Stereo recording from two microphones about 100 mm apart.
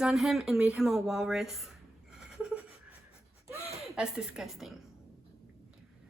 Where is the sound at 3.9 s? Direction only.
5° right (ahead or behind).